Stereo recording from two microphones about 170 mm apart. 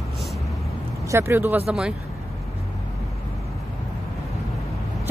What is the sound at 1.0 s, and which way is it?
Speech, 15° right (ahead or behind).